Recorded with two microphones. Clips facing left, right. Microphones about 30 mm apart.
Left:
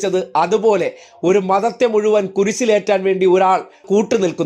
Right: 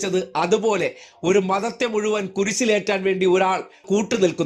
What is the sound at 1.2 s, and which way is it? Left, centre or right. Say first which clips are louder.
Speech: left 5 dB; right.